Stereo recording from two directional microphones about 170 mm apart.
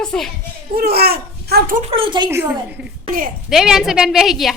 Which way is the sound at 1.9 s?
30° right (ahead or behind).